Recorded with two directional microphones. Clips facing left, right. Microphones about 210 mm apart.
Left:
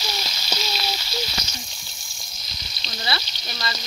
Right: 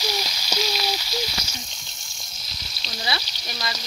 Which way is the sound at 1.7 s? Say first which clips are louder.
Even; 5° left (ahead or behind).